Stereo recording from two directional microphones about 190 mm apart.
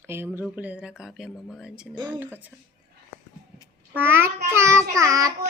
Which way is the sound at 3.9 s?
10° right (ahead or behind).